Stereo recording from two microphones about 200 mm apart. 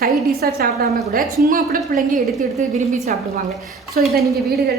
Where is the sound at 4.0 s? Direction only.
45° right (ahead or behind).